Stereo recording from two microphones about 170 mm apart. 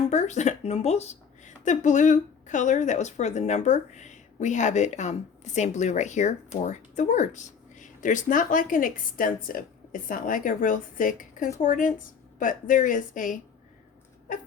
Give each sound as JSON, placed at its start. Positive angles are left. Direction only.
{"t": 0.1, "sound": "speech", "side_deg": 45}